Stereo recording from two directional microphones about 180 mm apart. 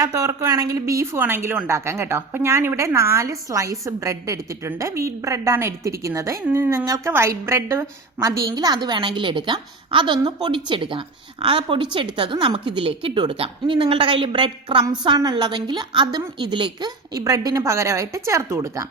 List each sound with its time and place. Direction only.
0.0 s a woman's voice: 20° right (ahead or behind)